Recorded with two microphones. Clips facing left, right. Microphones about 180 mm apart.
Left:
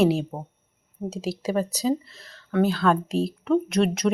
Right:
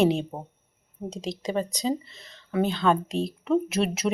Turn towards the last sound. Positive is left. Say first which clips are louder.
# left 4 dB
turn(degrees=-5)  # may be behind; listen again after turning